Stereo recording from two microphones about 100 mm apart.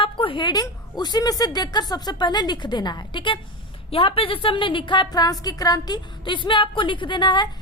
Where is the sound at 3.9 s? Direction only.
70° left (ahead or behind).